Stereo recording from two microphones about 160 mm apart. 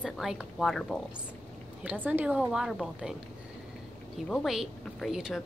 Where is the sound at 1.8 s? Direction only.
10° right (ahead or behind).